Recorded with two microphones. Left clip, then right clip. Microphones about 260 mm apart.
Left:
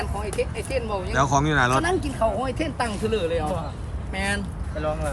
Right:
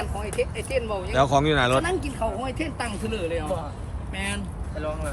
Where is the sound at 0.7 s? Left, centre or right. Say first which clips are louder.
Even; left.